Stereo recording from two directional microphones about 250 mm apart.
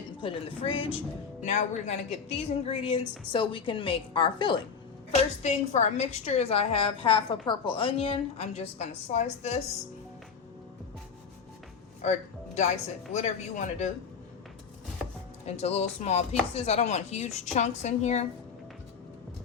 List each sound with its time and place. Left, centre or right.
0.2 s speech: left
12.0 s speech: left
15.4 s speech: left